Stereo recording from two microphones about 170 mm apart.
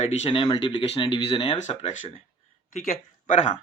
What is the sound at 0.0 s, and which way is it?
Speech, 35° left (ahead or behind).